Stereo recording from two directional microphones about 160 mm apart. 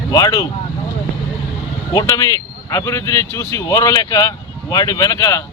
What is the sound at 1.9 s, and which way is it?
Speech, 20° left (ahead or behind).